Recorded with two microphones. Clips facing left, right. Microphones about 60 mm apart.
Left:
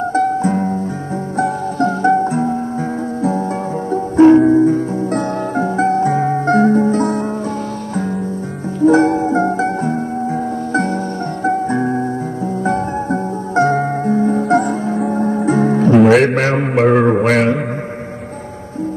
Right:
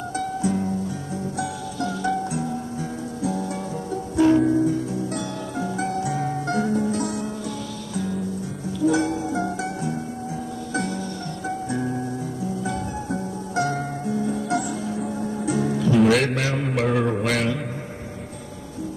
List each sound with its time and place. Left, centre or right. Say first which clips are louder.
0.1 s music: left 8 dB; left
16.3 s mantra: left 9 dB; left